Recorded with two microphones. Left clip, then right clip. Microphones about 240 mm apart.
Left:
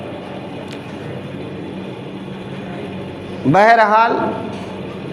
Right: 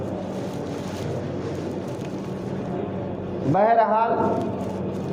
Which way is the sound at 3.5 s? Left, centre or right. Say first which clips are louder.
Left 8 dB; left.